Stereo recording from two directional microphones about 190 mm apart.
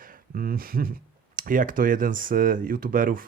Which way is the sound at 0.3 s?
50° right (ahead or behind).